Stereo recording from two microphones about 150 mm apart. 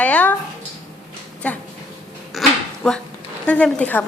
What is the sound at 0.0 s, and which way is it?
Speech, 10° left (ahead or behind).